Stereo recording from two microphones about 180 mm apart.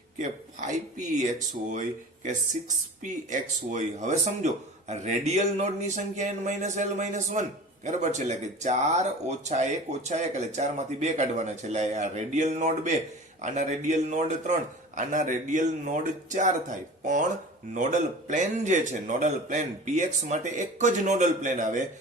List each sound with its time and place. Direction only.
0.7 s speech: 40° right (ahead or behind)
18.3 s speech: 45° right (ahead or behind)